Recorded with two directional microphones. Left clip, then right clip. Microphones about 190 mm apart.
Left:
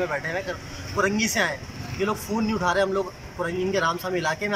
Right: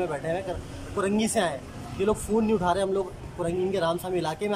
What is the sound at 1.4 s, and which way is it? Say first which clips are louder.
Speech: left 2 dB; 25° right (ahead or behind).